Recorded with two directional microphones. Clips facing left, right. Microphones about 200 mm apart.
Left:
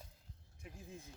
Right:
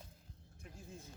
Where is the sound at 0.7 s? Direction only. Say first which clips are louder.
Left 1 dB; 15° left (ahead or behind).